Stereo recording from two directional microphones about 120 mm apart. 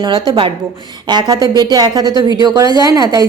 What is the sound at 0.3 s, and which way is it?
Speech, 45° right (ahead or behind).